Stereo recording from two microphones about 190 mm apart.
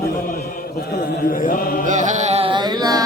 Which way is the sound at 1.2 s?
45° left (ahead or behind).